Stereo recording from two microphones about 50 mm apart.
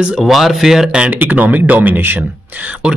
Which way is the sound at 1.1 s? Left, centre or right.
Right.